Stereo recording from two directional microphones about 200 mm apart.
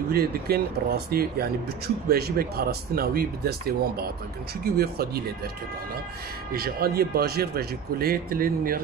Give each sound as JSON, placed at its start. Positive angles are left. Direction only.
{"t": 0.1, "sound": "a man's voice", "side_deg": -50}
{"t": 6.5, "sound": "a man's voice", "side_deg": -50}